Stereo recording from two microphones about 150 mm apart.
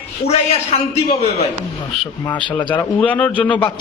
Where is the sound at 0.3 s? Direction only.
45° left (ahead or behind).